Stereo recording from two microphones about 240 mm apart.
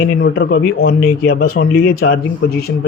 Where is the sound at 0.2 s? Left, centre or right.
Left.